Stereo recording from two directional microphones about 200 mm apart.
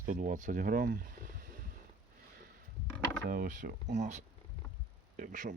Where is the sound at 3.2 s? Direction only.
45° right (ahead or behind).